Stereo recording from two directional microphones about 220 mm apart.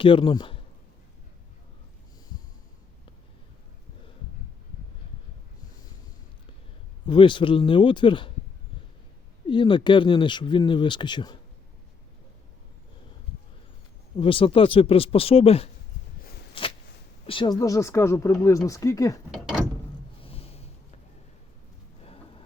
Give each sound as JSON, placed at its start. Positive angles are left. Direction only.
{"t": 0.0, "sound": "a man's voice", "side_deg": 20}
{"t": 7.0, "sound": "speech", "side_deg": 20}
{"t": 9.5, "sound": "speech", "side_deg": 20}
{"t": 14.2, "sound": "speech", "side_deg": 25}
{"t": 16.6, "sound": "a sound", "side_deg": 25}
{"t": 17.2, "sound": "speech", "side_deg": 20}
{"t": 19.3, "sound": "mechanisms", "side_deg": -5}
{"t": 20.2, "sound": "a sound", "side_deg": 25}
{"t": 22.0, "sound": "a sound", "side_deg": 25}